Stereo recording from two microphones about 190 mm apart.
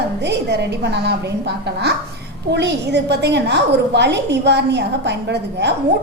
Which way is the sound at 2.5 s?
65° right (ahead or behind).